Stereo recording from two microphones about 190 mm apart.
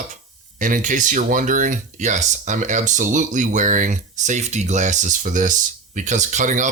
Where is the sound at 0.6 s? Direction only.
40° right (ahead or behind).